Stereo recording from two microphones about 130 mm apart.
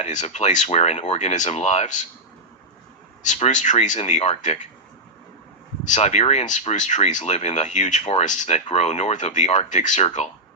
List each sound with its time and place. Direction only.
0.0 s speech: 65° left (ahead or behind)
3.2 s speech: 60° left (ahead or behind)
5.8 s speech: 65° left (ahead or behind)